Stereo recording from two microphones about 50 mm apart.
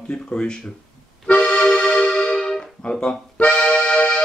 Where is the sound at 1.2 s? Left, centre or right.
Left.